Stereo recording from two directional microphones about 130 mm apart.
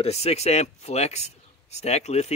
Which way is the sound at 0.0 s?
55° left (ahead or behind).